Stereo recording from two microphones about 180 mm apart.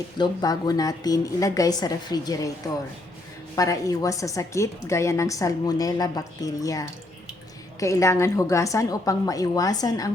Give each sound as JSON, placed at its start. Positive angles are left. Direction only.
{"t": 0.2, "sound": "a woman's voice", "side_deg": 20}
{"t": 3.5, "sound": "a woman's voice", "side_deg": 20}